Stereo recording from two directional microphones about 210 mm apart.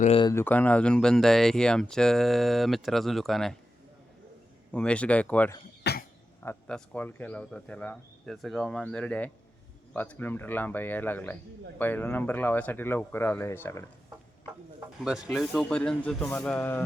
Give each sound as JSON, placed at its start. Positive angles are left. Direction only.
{"t": 0.0, "sound": "speech", "side_deg": 25}
{"t": 0.3, "sound": "speech", "side_deg": 10}
{"t": 4.7, "sound": "speech", "side_deg": 5}
{"t": 5.8, "sound": "cough", "side_deg": 50}
{"t": 6.4, "sound": "speech", "side_deg": 10}
{"t": 15.0, "sound": "speech", "side_deg": -5}